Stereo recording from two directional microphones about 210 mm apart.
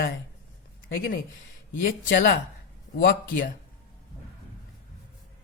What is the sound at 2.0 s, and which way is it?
Speech, 45° left (ahead or behind).